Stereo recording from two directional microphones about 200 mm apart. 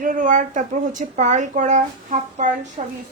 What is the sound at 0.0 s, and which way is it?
A woman's voice, 40° right (ahead or behind).